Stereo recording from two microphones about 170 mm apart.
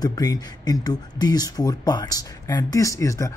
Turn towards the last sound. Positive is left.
turn(degrees=15)  # may be behind; listen again after turning